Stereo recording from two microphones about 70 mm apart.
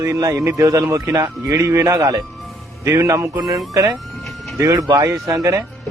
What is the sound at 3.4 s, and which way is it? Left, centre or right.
Speech, centre.